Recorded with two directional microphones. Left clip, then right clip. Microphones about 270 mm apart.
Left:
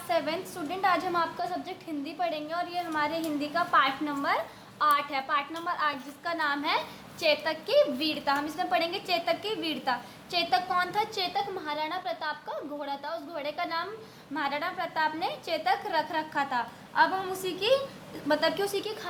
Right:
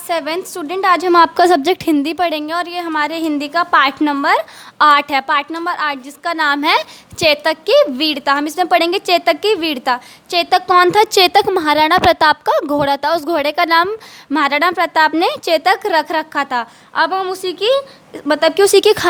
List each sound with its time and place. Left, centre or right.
0.1 s a woman's voice: right